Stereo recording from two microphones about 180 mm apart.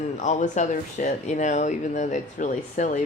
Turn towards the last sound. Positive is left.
turn(degrees=45)  # may be behind; listen again after turning